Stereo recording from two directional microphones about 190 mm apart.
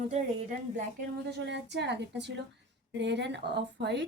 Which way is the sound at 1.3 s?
65° right (ahead or behind).